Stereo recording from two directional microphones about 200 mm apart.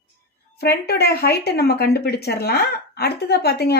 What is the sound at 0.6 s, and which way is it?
Speech, 55° left (ahead or behind).